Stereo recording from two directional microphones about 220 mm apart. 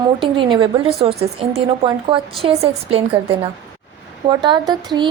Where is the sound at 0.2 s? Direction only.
20° right (ahead or behind).